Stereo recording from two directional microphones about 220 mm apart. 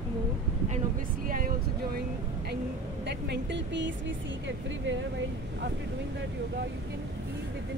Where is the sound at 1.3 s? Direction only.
40° right (ahead or behind).